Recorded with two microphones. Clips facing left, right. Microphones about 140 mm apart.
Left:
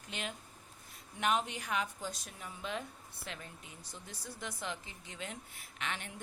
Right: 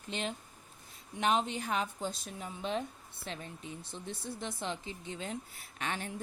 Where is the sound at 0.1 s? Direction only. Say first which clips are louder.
Right 5 dB; 30° right (ahead or behind).